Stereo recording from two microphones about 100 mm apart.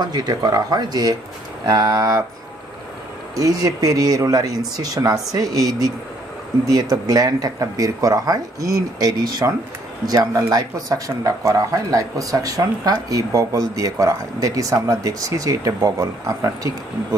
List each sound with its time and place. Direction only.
0.0 s speech: 40° right (ahead or behind)
3.3 s speech: 40° right (ahead or behind)